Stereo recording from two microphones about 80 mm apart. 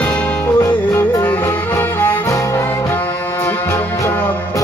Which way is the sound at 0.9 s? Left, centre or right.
Left.